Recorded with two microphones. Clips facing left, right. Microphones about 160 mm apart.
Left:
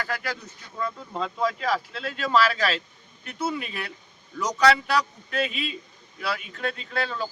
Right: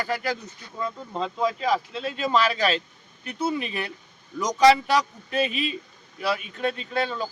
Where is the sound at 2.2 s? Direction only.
25° right (ahead or behind).